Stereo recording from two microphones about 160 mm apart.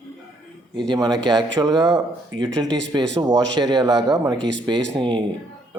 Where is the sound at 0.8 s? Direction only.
25° right (ahead or behind).